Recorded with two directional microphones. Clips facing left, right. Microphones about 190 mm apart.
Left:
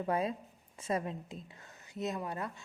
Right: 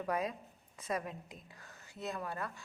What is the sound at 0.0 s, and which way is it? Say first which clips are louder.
Speech: left 3 dB; 30° left (ahead or behind).